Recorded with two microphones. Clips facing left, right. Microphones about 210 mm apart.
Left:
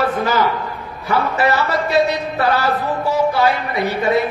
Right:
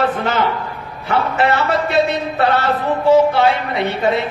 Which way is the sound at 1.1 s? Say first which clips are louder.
Right 1 dB; 25° right (ahead or behind).